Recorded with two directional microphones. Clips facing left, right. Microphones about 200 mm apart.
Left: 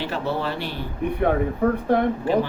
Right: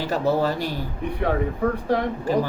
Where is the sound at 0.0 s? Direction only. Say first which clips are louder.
Right 4 dB; 40° right (ahead or behind).